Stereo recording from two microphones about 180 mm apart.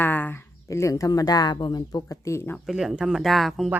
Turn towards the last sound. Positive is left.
turn(degrees=0)  # may be behind; listen again after turning